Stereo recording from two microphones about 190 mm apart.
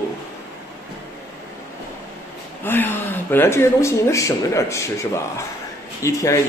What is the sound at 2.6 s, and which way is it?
Speech, 10° left (ahead or behind).